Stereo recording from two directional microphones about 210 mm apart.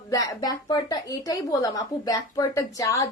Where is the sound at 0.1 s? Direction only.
15° left (ahead or behind).